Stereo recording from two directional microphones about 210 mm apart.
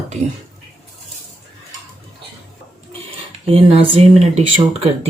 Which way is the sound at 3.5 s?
30° right (ahead or behind).